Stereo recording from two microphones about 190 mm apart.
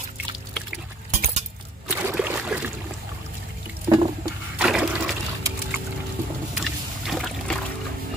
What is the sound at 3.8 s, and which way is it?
Water, 20° right (ahead or behind).